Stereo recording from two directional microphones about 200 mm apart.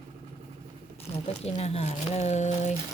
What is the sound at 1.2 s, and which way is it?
Speech, 35° left (ahead or behind).